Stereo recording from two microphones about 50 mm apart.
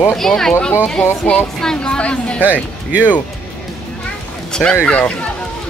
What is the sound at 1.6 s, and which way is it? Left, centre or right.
Speech, centre.